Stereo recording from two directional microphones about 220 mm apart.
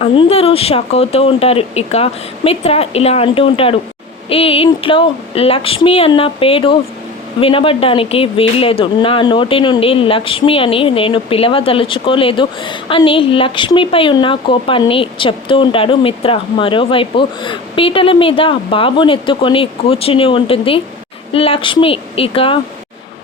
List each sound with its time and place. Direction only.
0.0 s speech: 25° left (ahead or behind)